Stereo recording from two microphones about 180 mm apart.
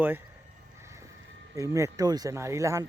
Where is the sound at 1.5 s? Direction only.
20° right (ahead or behind).